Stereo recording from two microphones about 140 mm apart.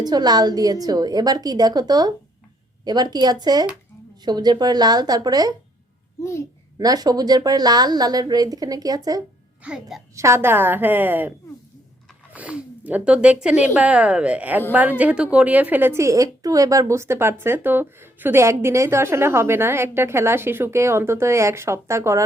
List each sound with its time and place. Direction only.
0.0 s a woman's voice: 30° right (ahead or behind)
6.7 s a woman's voice: 30° right (ahead or behind)
9.6 s a woman's voice: 5° right (ahead or behind)
10.2 s a woman's voice: 20° right (ahead or behind)